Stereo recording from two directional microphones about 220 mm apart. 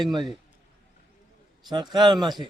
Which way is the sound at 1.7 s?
20° right (ahead or behind).